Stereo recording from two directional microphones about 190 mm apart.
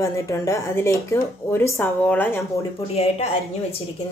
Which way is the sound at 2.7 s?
30° left (ahead or behind).